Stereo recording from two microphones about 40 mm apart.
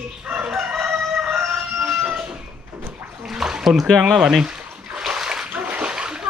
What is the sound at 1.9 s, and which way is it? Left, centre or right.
Train, right.